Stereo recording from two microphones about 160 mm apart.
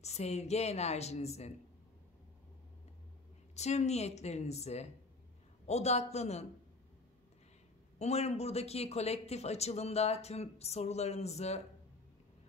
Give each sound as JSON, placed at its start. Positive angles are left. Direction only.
{"t": 0.0, "sound": "a woman's voice", "side_deg": 45}
{"t": 3.5, "sound": "a woman's voice", "side_deg": 45}
{"t": 8.0, "sound": "a man's voice", "side_deg": 40}